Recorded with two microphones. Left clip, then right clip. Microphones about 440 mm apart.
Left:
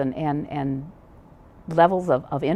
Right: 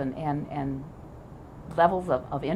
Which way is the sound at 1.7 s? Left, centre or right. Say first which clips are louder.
Left 5 dB; left.